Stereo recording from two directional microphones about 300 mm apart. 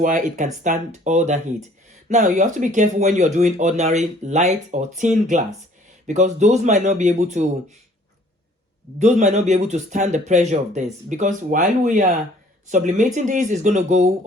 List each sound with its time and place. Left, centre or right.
0.0 s speech: right
9.0 s speech: right